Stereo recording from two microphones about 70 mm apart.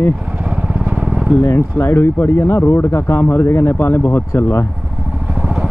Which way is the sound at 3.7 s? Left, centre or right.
Left.